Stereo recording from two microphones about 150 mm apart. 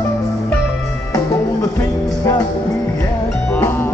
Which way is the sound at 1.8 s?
20° left (ahead or behind).